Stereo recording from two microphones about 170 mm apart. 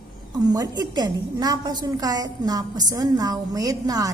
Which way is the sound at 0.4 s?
20° right (ahead or behind).